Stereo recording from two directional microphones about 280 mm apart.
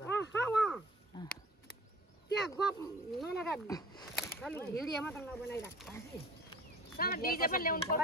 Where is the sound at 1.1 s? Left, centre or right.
Centre.